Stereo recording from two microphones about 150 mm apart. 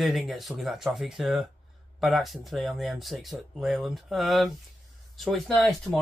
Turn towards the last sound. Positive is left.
turn(degrees=5)  # may be behind; listen again after turning